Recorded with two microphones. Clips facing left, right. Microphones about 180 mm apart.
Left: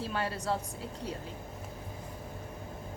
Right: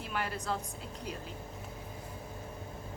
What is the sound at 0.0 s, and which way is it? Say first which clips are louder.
Speech: left 3 dB; 30° left (ahead or behind).